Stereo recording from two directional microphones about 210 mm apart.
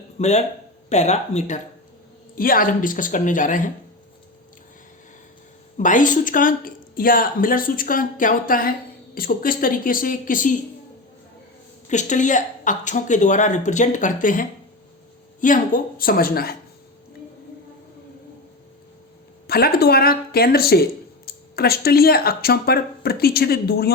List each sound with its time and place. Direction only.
0.2 s speech: 30° left (ahead or behind)
5.7 s speech: 35° left (ahead or behind)
11.9 s speech: 35° left (ahead or behind)
19.5 s speech: 45° left (ahead or behind)